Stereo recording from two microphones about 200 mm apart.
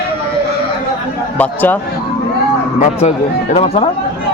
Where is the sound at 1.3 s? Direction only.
10° left (ahead or behind).